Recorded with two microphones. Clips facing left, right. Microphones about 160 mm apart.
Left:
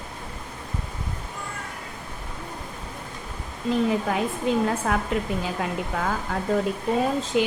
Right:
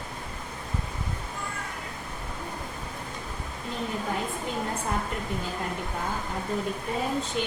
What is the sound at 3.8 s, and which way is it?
A woman's voice, 90° left.